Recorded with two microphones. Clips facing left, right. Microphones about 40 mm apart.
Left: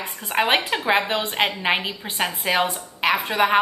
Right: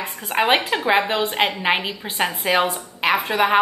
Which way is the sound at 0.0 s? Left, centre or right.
Centre.